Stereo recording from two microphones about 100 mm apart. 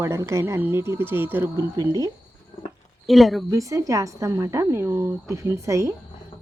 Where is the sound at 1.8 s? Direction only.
40° right (ahead or behind).